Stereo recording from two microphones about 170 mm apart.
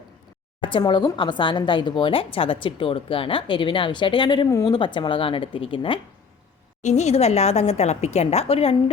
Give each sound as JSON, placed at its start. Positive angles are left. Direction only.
{"t": 0.6, "sound": "speech", "side_deg": 30}
{"t": 6.8, "sound": "a woman's voice", "side_deg": 40}